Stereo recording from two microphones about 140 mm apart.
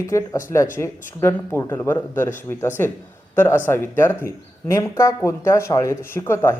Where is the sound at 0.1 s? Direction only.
20° left (ahead or behind).